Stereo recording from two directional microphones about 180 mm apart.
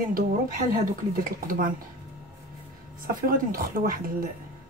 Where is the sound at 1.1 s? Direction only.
50° right (ahead or behind).